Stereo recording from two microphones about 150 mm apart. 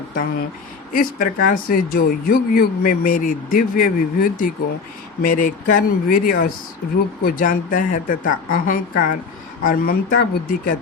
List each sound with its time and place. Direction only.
0.9 s speech: 70° left (ahead or behind)